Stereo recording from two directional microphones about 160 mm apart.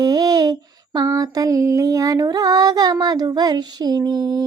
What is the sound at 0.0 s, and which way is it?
Mantra, 25° right (ahead or behind).